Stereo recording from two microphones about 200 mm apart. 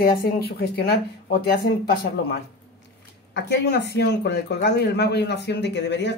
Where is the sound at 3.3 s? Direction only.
60° left (ahead or behind).